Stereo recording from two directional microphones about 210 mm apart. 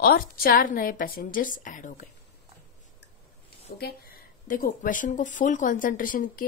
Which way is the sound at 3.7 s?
45° left (ahead or behind).